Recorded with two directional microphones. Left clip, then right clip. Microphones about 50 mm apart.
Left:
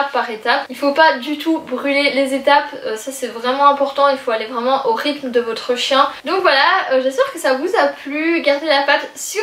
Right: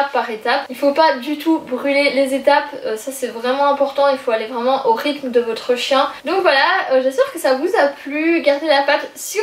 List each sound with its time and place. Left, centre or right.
0.1 s speech: centre